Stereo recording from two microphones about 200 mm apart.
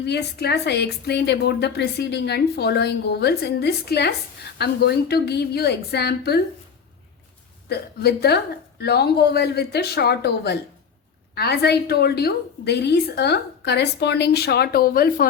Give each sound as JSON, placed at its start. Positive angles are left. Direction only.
{"t": 0.0, "sound": "a woman's voice", "side_deg": 55}
{"t": 7.7, "sound": "a woman's voice", "side_deg": 55}